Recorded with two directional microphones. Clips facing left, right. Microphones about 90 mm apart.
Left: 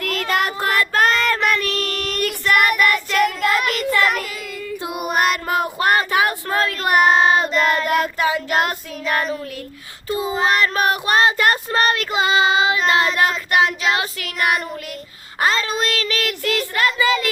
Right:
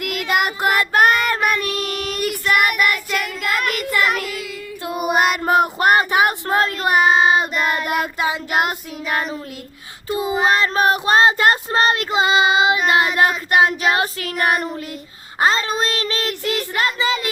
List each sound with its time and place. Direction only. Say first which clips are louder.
0.0 s child singing: even; 10° right (ahead or behind)
6.9 s child singing: left 1 dB; centre (ahead or behind); by 17.2 s 25° right (ahead or behind)